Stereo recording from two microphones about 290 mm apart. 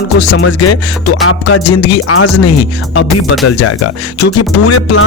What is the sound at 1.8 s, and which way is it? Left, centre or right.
Speech, left.